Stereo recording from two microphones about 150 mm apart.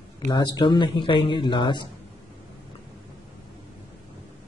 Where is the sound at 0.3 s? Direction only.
25° left (ahead or behind).